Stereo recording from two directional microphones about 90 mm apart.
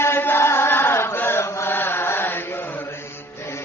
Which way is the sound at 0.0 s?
25° left (ahead or behind).